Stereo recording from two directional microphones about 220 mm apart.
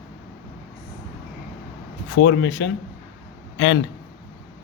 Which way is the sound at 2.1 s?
65° left (ahead or behind).